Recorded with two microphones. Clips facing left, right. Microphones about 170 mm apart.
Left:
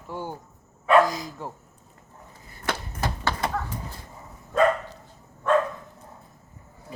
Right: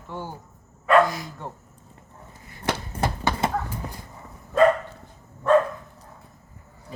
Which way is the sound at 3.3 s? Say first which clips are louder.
Right 1 dB; 15° right (ahead or behind).